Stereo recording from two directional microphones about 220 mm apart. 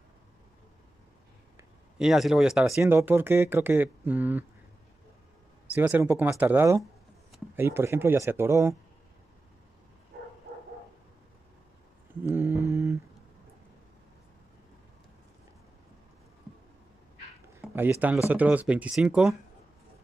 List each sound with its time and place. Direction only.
2.0 s speech: centre (ahead or behind)
5.7 s speech: 10° right (ahead or behind)
10.1 s bow-wow: 45° right (ahead or behind)
12.2 s mantra: 10° right (ahead or behind)
17.6 s speech: 10° right (ahead or behind)